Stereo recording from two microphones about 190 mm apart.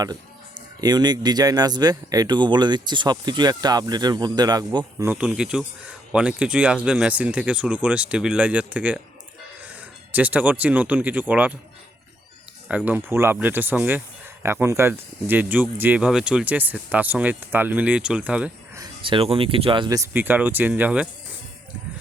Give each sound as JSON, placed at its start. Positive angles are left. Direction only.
{"t": 0.0, "sound": "speech", "side_deg": -20}
{"t": 5.0, "sound": "speech", "side_deg": -5}
{"t": 10.1, "sound": "speech", "side_deg": -10}
{"t": 12.6, "sound": "speech", "side_deg": -10}
{"t": 18.8, "sound": "speech", "side_deg": -25}
{"t": 20.1, "sound": "speech", "side_deg": -10}